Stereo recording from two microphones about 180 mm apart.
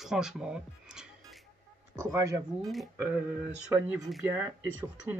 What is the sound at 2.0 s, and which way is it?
Speech, 15° right (ahead or behind).